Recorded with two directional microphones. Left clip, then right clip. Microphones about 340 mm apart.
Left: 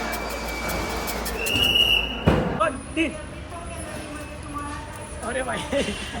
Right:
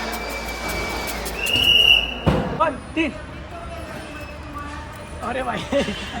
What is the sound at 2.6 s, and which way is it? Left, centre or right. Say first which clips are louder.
Music: right 2 dB; right.